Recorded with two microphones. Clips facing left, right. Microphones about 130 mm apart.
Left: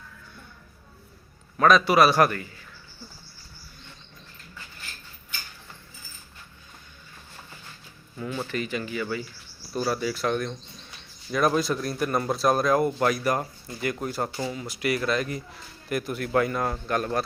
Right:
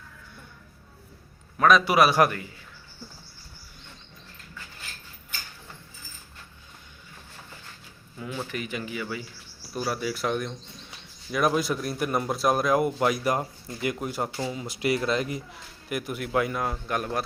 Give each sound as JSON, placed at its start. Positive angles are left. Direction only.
{"t": 1.5, "sound": "a man's voice", "side_deg": -5}
{"t": 8.4, "sound": "a man's voice", "side_deg": -15}
{"t": 15.9, "sound": "a man's voice", "side_deg": -10}